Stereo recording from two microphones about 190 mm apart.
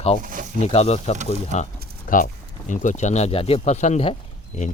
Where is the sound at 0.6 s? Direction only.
35° left (ahead or behind).